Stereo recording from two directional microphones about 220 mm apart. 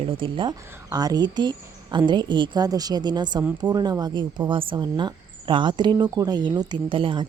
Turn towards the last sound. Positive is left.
turn(degrees=-20)  # may be behind; listen again after turning